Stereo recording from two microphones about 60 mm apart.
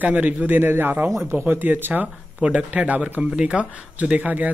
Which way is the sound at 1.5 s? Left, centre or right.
Right.